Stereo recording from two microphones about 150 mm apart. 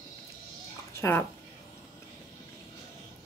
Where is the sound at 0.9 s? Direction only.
15° left (ahead or behind).